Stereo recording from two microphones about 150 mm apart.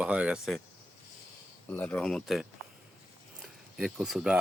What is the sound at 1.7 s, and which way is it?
Speech, 10° left (ahead or behind).